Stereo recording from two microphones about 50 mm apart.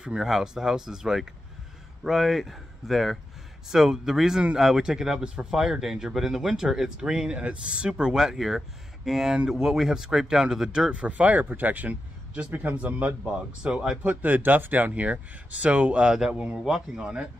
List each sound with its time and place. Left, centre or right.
0.0 s speech: centre
5.5 s speech: centre
10.9 s a man's voice: right
14.0 s speech: right
16.1 s speech: centre